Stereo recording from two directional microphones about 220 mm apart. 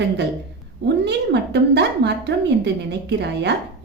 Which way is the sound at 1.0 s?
50° right (ahead or behind).